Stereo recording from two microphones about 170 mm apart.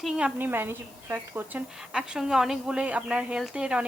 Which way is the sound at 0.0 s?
5° right (ahead or behind).